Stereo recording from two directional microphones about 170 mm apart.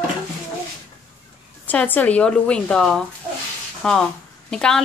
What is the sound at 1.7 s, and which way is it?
A woman's voice, 10° left (ahead or behind).